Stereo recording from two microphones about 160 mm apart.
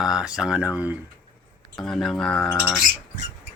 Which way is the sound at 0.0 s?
5° right (ahead or behind).